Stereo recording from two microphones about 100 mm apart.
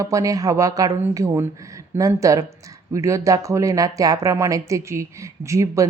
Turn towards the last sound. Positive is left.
turn(degrees=-30)  # may be behind; listen again after turning